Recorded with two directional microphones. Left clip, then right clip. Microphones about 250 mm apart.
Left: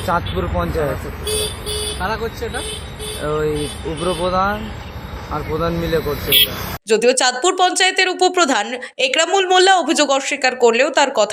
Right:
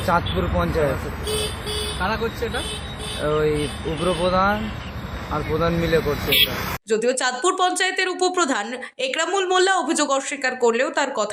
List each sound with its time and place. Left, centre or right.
0.0 s speech: centre
2.0 s speech: left
3.2 s speech: centre